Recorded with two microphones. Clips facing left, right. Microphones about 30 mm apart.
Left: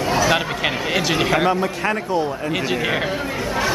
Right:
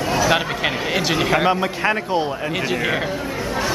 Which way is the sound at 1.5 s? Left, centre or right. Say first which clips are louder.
Right 1 dB; right.